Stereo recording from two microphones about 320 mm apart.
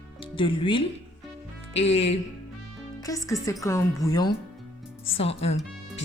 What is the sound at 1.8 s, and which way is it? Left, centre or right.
Speech, left.